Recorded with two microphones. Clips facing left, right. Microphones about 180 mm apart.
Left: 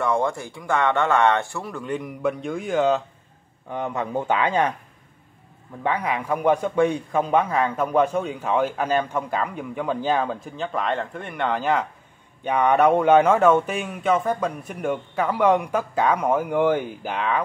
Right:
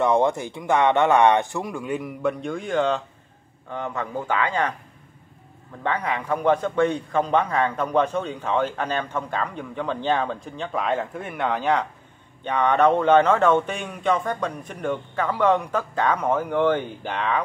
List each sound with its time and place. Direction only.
0.0 s speech: 20° right (ahead or behind); by 3.0 s 5° left (ahead or behind)
3.7 s a man's voice: 15° left (ahead or behind)
5.9 s a man's voice: 5° left (ahead or behind)